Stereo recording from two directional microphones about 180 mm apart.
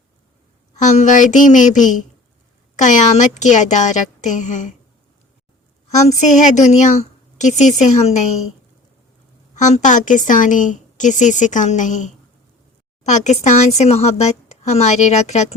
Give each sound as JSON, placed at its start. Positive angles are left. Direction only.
{"t": 0.8, "sound": "a woman's voice", "side_deg": 40}
{"t": 6.1, "sound": "speech", "side_deg": 40}
{"t": 9.6, "sound": "a woman's voice", "side_deg": 40}